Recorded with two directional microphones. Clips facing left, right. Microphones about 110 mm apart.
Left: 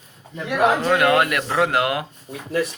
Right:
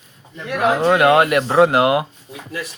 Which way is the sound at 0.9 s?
25° right (ahead or behind).